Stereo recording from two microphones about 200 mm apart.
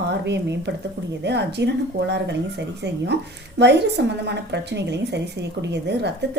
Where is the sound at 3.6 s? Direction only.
60° right (ahead or behind).